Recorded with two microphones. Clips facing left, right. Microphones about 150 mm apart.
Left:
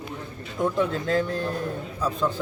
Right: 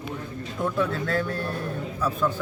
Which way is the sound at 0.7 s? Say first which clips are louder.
Left 1 dB; 30° left (ahead or behind).